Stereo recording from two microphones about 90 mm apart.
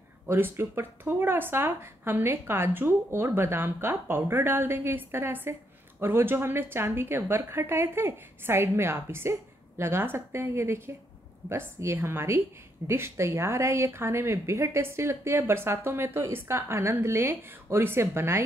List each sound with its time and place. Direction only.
0.3 s speech: 25° right (ahead or behind)